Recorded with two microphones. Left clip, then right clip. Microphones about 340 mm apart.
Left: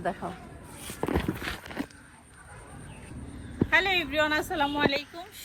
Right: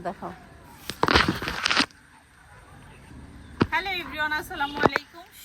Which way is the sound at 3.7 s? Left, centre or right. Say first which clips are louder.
Left 4 dB; centre.